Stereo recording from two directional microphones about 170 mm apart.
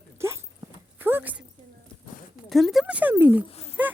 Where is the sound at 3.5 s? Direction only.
35° left (ahead or behind).